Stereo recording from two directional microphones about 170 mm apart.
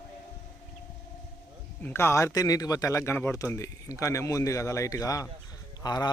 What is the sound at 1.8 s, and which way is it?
Speech, 15° left (ahead or behind).